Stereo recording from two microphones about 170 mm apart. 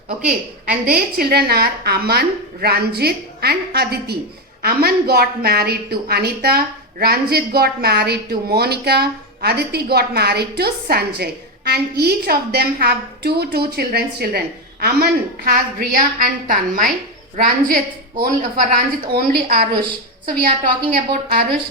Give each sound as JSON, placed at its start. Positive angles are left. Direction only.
{"t": 0.2, "sound": "a woman's voice", "side_deg": -5}
{"t": 1.1, "sound": "a woman's voice", "side_deg": -65}